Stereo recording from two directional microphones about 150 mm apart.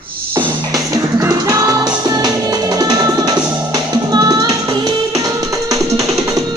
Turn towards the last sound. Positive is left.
turn(degrees=-25)  # may be behind; listen again after turning